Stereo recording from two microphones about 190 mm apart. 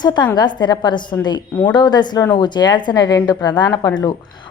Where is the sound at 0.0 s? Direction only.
20° left (ahead or behind).